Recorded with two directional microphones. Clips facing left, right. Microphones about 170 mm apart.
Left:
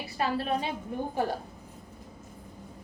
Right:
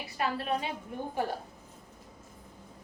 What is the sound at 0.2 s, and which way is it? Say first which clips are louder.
Speech: left 2 dB; 30° left (ahead or behind).